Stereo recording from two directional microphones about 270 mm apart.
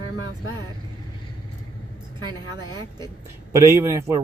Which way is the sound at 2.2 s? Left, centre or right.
Centre.